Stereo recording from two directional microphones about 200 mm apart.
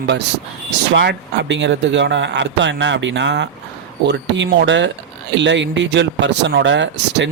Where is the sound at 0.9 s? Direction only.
65° right (ahead or behind).